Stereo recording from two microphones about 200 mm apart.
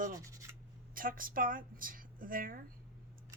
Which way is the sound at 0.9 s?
45° right (ahead or behind).